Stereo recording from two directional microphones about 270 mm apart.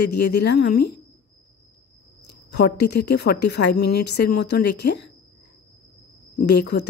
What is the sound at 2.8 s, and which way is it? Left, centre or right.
Speech, left.